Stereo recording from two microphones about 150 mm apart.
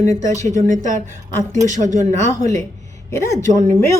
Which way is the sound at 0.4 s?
55° right (ahead or behind).